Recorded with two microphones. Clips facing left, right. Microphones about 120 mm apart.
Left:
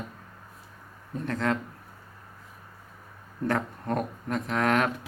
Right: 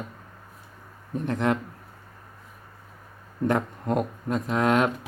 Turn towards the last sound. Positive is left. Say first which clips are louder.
# right 3 dB
turn(degrees=-15)  # may be behind; listen again after turning